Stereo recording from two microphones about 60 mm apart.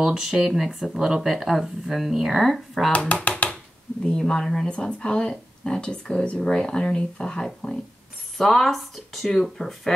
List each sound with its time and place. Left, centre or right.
0.0 s speech: centre
2.9 s speech: left
4.0 s speech: centre